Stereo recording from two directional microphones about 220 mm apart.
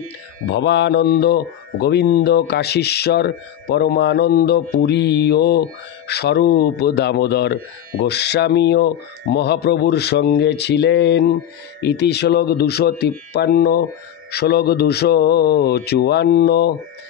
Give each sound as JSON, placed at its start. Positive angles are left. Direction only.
{"t": 0.5, "sound": "speech", "side_deg": 50}